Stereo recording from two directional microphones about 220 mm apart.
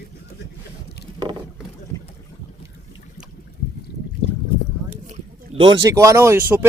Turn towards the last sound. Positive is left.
turn(degrees=-10)  # may be behind; listen again after turning